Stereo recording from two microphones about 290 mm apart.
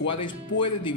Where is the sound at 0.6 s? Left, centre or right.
Centre.